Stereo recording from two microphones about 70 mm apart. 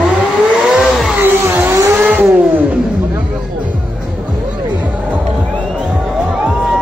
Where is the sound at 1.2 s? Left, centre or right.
Right.